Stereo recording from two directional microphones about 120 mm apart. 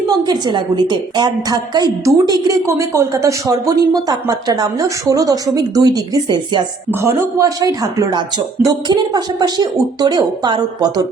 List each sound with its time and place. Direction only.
0.3 s a woman's voice: 40° right (ahead or behind)
7.0 s a woman's voice: 25° right (ahead or behind)